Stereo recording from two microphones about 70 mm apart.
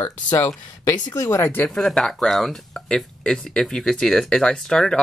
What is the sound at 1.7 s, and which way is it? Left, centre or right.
Speech, centre.